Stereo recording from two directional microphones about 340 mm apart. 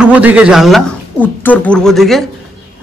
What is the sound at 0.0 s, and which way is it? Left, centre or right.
Speech, centre.